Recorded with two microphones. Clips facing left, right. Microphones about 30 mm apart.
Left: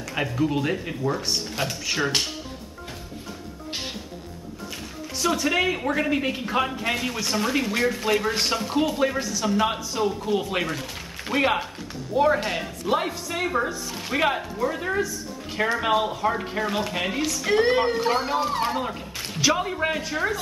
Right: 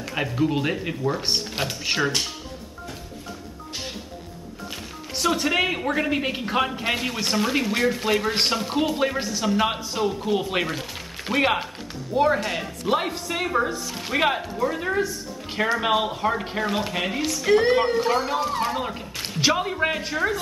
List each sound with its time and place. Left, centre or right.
0.1 s speech: centre
1.2 s speech: right
5.2 s speech: centre
16.0 s speech: centre
18.8 s speech: centre